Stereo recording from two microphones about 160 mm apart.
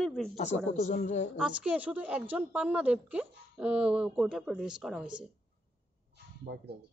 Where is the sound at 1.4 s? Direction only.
5° right (ahead or behind).